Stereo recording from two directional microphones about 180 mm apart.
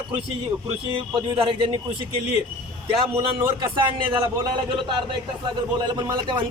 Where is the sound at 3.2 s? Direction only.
30° right (ahead or behind).